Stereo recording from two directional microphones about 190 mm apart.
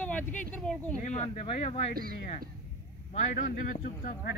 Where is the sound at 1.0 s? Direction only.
35° left (ahead or behind).